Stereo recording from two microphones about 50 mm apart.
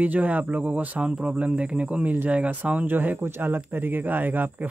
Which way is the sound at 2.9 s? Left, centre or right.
Right.